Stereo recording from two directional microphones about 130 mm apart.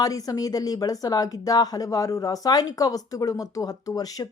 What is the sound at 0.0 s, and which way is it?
Speech, 30° left (ahead or behind).